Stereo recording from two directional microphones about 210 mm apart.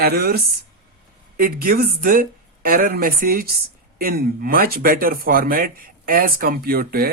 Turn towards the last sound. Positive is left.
turn(degrees=-45)  # may be behind; listen again after turning